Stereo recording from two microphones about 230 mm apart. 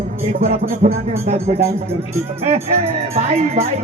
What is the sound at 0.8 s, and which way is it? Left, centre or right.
Speech, right.